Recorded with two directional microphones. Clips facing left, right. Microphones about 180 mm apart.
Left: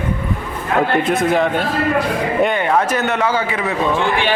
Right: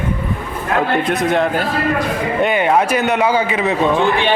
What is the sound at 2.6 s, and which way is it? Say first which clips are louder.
Speech: right 2 dB; 15° right (ahead or behind).